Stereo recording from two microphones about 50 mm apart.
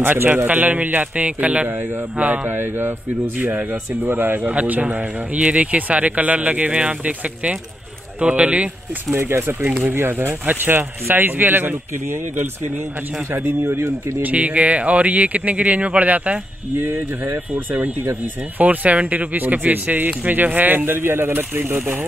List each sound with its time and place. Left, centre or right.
0.0 s speech: right
2.4 s speech: right
4.5 s speech: right
9.1 s speech: right
10.4 s speech: right
14.2 s speech: right
16.8 s speech: right
18.6 s speech: right